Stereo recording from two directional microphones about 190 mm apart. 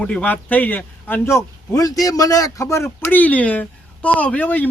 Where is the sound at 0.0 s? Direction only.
5° left (ahead or behind).